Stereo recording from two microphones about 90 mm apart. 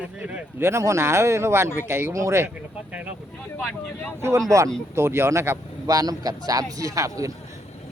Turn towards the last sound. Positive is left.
turn(degrees=-40)  # may be behind; listen again after turning